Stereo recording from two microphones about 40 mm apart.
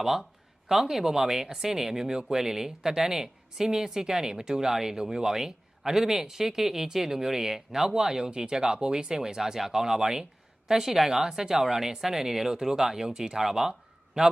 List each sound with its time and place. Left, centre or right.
0.0 s speech: centre